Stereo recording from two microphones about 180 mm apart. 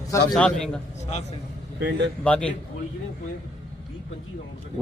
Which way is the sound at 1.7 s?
80° right.